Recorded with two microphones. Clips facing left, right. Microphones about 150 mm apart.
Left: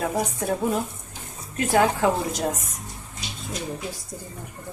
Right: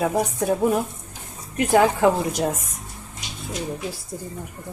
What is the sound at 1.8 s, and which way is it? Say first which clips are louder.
Speech: right 1 dB; 10° right (ahead or behind).